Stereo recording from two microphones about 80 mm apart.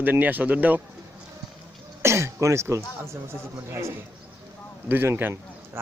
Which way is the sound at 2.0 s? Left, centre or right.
Right.